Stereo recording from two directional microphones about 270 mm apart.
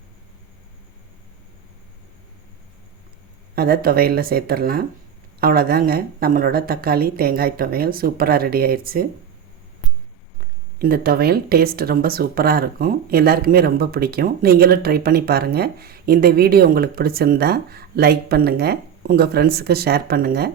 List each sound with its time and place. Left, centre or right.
3.5 s speech: right
10.8 s speech: right